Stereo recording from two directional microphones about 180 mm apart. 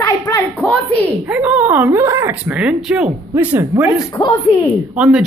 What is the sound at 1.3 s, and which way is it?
Speech, 10° right (ahead or behind).